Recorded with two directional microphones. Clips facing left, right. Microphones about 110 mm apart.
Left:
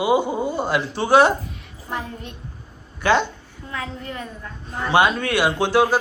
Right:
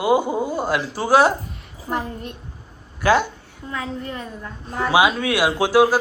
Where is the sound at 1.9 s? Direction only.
40° right (ahead or behind).